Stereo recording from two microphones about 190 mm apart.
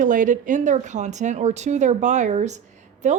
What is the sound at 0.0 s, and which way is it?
A woman's voice, 40° right (ahead or behind).